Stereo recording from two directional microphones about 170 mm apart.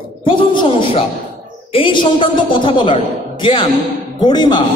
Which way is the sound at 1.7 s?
30° left (ahead or behind).